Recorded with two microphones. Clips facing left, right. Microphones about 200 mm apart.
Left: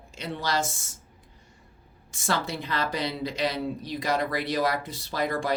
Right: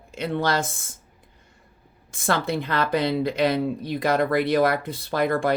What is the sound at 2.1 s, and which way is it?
Speech, 55° right (ahead or behind).